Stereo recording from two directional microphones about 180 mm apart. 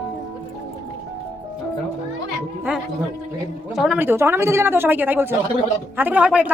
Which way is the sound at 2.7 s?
10° right (ahead or behind).